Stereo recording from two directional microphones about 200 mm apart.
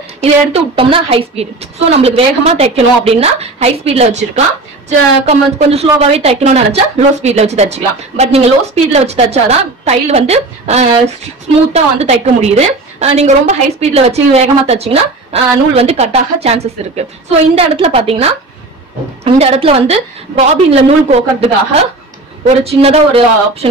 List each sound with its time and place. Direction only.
0.2 s a woman's voice: 25° right (ahead or behind)
19.2 s a woman's voice: 30° right (ahead or behind)
22.6 s speech: 30° right (ahead or behind)